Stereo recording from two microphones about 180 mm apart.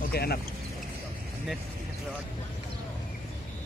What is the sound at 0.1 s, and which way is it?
Speech, 60° left (ahead or behind).